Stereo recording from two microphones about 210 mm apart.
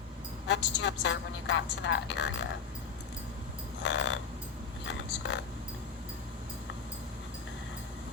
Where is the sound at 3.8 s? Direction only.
60° left (ahead or behind).